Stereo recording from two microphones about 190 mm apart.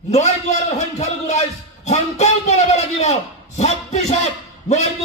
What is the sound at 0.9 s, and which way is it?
Speech, 35° left (ahead or behind).